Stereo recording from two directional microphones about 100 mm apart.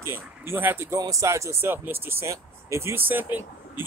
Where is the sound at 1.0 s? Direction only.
35° right (ahead or behind).